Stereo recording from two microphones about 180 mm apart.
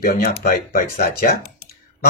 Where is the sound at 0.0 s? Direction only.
55° left (ahead or behind).